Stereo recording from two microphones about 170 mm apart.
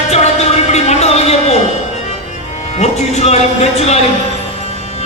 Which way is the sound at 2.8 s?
40° left (ahead or behind).